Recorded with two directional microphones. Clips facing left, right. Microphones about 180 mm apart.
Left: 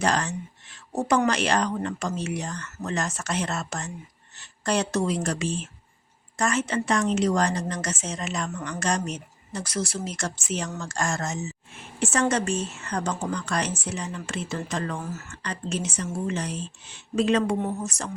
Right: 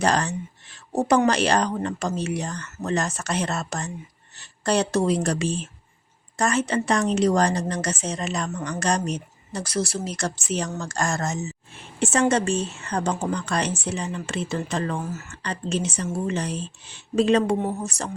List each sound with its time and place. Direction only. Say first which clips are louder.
0.0 s a woman's voice: right 3 dB; 35° right (ahead or behind)
11.9 s a woman's voice: right 3 dB; 25° right (ahead or behind)